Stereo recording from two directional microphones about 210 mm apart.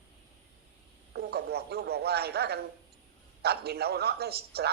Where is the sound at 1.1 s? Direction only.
50° right (ahead or behind).